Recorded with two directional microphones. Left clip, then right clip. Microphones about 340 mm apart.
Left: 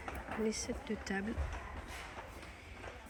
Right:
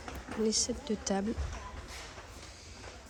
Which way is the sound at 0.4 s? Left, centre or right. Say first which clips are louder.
Right 8 dB; centre.